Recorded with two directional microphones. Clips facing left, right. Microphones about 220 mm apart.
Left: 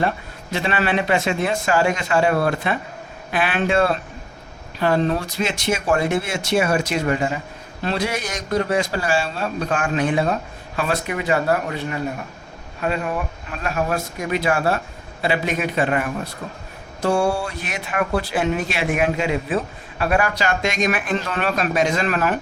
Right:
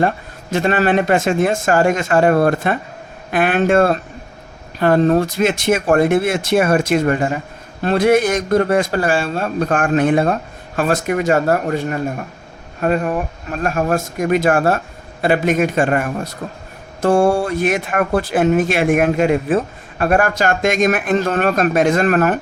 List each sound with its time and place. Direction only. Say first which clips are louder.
0.5 s speech: right 6 dB; 45° right (ahead or behind)